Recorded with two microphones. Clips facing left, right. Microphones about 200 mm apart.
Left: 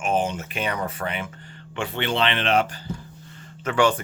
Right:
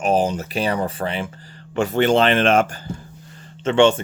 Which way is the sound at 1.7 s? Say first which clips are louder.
Right 9 dB; 45° right (ahead or behind).